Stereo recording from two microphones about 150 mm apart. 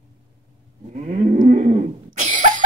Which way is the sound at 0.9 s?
55° right (ahead or behind).